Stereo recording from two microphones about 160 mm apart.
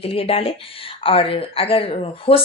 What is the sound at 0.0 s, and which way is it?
Speech, 35° left (ahead or behind).